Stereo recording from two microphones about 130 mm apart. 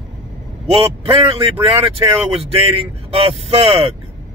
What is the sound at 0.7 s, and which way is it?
Speech, 45° right (ahead or behind).